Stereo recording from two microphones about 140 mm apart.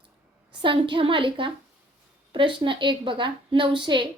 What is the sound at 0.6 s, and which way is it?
Speech, 35° right (ahead or behind).